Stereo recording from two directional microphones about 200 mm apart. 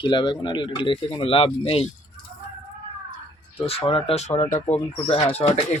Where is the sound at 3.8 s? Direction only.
25° left (ahead or behind).